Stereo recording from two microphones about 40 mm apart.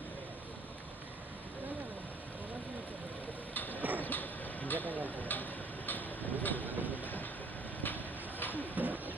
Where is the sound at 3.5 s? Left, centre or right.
Left.